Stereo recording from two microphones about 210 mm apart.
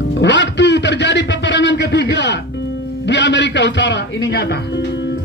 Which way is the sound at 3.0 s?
55° left (ahead or behind).